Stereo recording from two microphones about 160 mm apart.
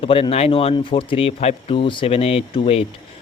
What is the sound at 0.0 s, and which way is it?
Speech, 35° left (ahead or behind).